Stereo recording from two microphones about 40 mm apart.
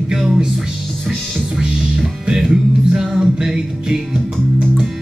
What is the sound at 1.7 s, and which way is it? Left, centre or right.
Music, centre.